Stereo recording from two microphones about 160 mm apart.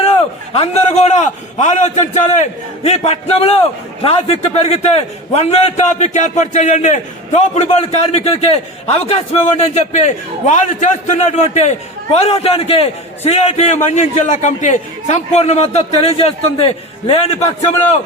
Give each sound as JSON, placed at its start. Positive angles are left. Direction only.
{"t": 0.5, "sound": "a man's voice", "side_deg": 40}